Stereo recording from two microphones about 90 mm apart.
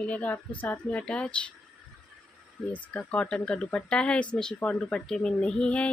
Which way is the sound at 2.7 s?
15° left (ahead or behind).